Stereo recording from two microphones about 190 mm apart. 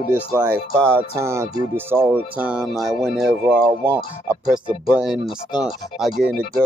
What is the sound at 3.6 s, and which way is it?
Speech, 25° right (ahead or behind).